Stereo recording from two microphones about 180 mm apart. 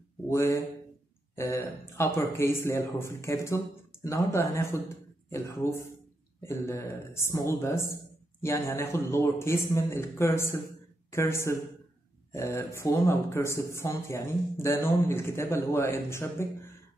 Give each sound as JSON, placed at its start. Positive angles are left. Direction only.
{"t": 0.3, "sound": "a man's voice", "side_deg": 15}